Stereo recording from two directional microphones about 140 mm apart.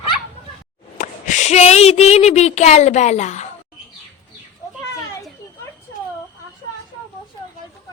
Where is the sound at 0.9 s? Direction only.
60° left (ahead or behind).